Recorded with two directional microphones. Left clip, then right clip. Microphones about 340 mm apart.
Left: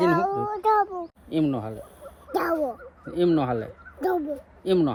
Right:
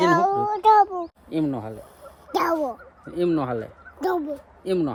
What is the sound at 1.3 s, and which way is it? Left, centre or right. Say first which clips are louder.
Speech: left 1 dB; centre.